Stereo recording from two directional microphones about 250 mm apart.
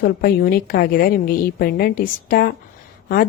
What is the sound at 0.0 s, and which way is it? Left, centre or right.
A woman's voice, left.